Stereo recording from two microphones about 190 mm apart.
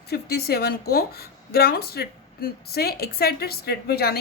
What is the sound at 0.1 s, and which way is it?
A woman's voice, 55° left (ahead or behind).